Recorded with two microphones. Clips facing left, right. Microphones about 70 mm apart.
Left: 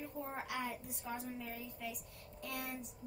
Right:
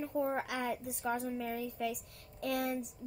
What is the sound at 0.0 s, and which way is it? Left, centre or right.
A woman's voice, right.